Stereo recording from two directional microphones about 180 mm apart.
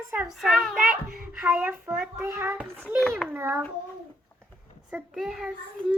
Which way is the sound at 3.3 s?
10° right (ahead or behind).